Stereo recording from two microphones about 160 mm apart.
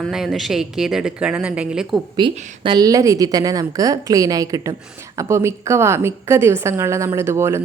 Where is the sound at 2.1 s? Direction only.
30° right (ahead or behind).